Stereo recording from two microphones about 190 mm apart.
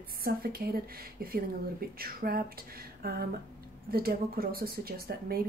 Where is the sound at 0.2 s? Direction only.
50° right (ahead or behind).